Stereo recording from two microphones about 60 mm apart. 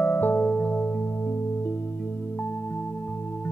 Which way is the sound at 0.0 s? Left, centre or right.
Left.